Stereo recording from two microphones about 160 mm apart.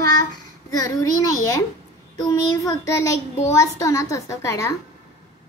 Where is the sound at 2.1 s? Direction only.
20° left (ahead or behind).